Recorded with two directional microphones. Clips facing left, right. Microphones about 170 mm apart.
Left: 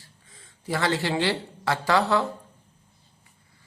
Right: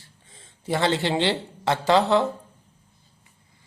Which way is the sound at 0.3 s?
25° right (ahead or behind).